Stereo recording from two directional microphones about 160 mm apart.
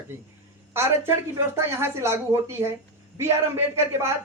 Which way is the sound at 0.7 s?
15° right (ahead or behind).